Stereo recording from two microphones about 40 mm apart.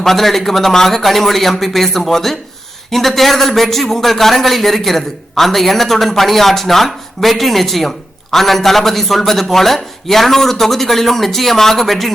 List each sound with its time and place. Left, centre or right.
0.0 s a man's voice: centre